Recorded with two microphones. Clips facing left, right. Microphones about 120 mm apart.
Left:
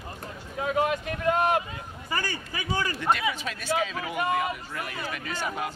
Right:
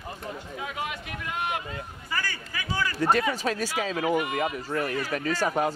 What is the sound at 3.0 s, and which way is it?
Speech, 40° right (ahead or behind).